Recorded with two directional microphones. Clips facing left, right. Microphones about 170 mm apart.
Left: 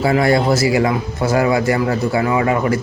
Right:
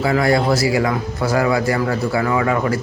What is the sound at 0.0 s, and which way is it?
Speech, 25° left (ahead or behind).